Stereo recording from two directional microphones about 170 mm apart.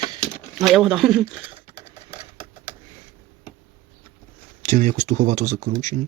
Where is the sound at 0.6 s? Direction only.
Centre (ahead or behind).